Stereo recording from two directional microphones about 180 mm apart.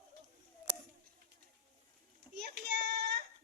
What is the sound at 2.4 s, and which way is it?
Child singing, 65° right (ahead or behind).